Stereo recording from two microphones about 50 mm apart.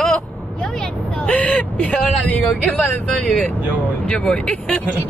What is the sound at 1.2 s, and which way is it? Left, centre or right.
Speech, left.